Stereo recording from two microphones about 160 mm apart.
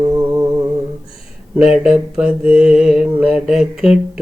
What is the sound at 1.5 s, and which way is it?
Mantra, 5° right (ahead or behind).